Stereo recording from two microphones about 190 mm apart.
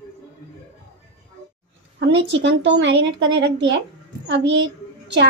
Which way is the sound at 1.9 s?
70° right (ahead or behind).